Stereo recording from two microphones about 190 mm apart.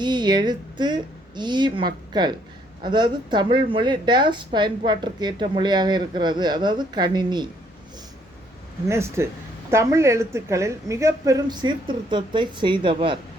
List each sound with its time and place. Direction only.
0.0 s a woman's voice: 25° right (ahead or behind)
8.9 s a woman's voice: 15° right (ahead or behind)